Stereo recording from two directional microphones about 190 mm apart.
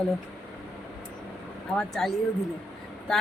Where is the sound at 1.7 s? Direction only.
Centre (ahead or behind).